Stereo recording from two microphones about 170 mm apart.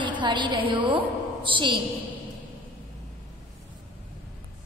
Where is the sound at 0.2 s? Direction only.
30° right (ahead or behind).